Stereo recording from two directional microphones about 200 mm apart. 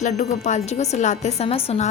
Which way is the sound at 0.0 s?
35° left (ahead or behind).